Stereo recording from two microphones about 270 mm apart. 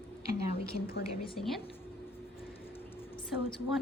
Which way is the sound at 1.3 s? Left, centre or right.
Centre.